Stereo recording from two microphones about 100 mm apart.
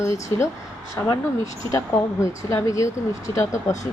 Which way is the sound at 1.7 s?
30° left (ahead or behind).